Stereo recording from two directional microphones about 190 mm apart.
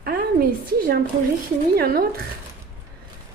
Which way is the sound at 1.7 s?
50° right (ahead or behind).